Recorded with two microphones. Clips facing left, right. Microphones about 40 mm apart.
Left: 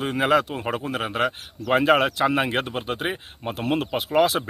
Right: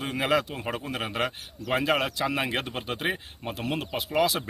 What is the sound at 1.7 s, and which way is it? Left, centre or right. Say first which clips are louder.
Speech: left 7 dB; left.